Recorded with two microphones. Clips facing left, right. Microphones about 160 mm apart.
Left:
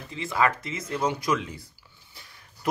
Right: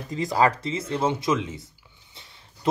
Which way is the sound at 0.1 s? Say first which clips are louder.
Right 4 dB; 40° right (ahead or behind).